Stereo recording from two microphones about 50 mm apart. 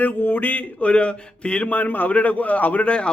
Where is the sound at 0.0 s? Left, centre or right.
Left.